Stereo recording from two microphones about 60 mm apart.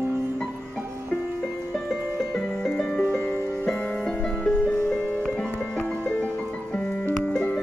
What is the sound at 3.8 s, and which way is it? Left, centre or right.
Music, left.